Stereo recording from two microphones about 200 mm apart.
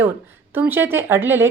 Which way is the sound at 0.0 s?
10° right (ahead or behind).